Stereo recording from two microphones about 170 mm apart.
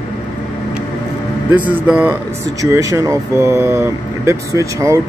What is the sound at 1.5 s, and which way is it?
Speech, 10° right (ahead or behind).